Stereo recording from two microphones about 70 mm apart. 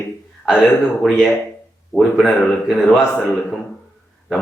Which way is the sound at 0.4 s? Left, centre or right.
Centre.